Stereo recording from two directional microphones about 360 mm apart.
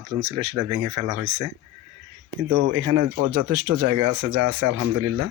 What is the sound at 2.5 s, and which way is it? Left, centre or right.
Speech, right.